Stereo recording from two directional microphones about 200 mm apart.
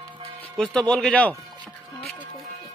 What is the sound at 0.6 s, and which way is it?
Speech, 5° left (ahead or behind).